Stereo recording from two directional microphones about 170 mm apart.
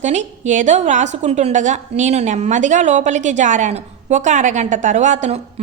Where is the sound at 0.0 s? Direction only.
45° right (ahead or behind).